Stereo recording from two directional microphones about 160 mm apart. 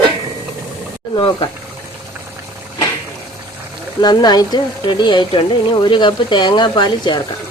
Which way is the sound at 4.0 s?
25° left (ahead or behind).